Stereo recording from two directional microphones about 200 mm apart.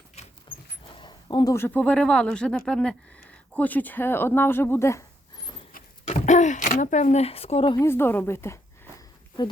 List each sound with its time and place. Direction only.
0.9 s speech: 20° left (ahead or behind)
5.7 s a sound: 35° left (ahead or behind)
7.8 s a woman's voice: 10° left (ahead or behind)